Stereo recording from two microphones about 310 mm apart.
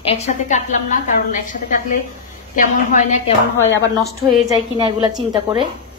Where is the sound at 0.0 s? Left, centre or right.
Centre.